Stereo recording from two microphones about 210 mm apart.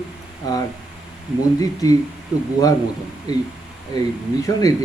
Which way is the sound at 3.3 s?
20° left (ahead or behind).